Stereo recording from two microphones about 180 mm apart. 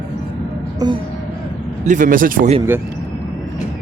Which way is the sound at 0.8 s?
20° right (ahead or behind).